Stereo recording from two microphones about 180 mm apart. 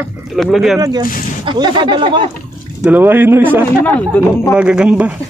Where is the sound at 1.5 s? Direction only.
25° right (ahead or behind).